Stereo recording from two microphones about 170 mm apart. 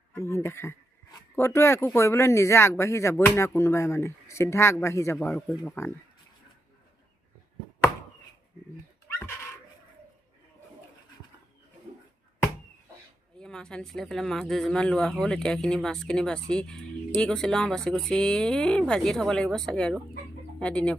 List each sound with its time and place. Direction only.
0.1 s speech: 15° left (ahead or behind)
13.4 s speech: 5° left (ahead or behind)